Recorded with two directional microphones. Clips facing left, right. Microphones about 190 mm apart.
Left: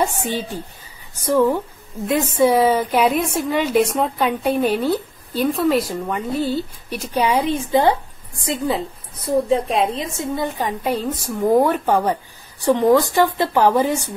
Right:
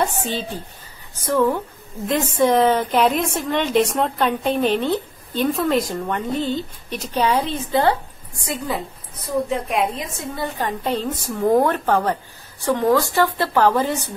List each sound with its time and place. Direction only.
0.2 s a woman's voice: 10° left (ahead or behind)
8.5 s a woman's voice: 25° left (ahead or behind)
10.1 s a woman's voice: 20° left (ahead or behind)